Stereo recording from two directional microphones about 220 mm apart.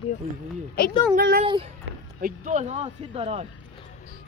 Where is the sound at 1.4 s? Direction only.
25° right (ahead or behind).